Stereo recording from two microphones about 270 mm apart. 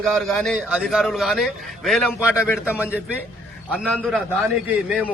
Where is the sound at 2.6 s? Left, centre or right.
Centre.